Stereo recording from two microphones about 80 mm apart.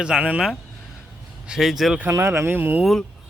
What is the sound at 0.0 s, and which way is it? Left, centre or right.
A man's voice, centre.